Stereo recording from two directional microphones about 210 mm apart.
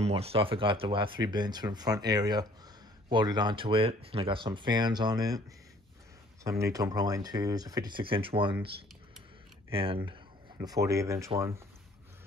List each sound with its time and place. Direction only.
0.0 s speech: 30° right (ahead or behind)
6.6 s speech: 15° right (ahead or behind)
9.7 s speech: 25° right (ahead or behind)